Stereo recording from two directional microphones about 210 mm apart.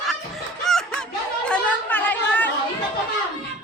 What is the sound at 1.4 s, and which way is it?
Chatter, 5° left (ahead or behind).